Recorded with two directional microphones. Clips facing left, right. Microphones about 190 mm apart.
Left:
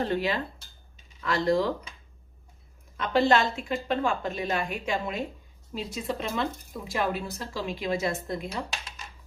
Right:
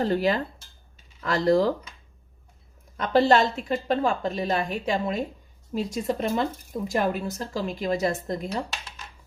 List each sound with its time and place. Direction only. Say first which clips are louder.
0.0 s a woman's voice: right 4 dB; 40° right (ahead or behind)
3.0 s a woman's voice: right 3 dB; 40° right (ahead or behind)